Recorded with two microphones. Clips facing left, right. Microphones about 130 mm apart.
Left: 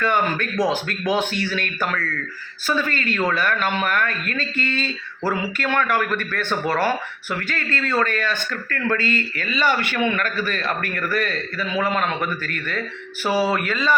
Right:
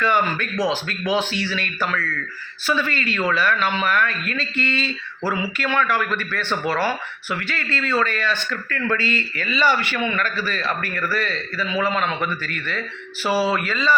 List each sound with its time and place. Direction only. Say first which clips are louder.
0.0 s speech: even; 50° left (ahead or behind)